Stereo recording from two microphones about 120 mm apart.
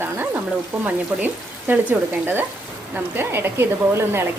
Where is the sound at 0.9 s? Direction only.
15° right (ahead or behind).